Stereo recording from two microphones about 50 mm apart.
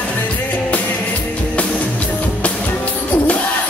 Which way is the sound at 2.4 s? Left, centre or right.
Left.